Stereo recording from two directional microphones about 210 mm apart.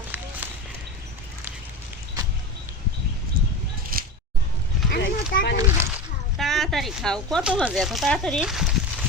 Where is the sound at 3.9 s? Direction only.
45° right (ahead or behind).